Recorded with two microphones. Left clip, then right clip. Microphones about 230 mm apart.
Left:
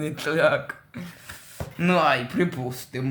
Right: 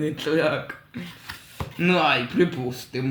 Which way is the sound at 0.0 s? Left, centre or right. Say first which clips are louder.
Left 1 dB; left.